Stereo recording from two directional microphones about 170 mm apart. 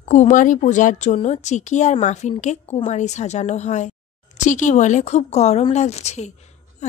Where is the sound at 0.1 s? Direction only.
45° left (ahead or behind).